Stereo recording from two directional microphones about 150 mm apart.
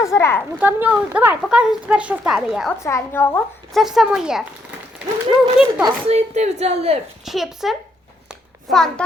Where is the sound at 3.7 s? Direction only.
Centre (ahead or behind).